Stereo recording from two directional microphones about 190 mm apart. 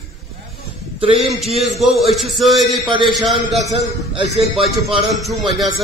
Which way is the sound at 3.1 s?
Centre (ahead or behind).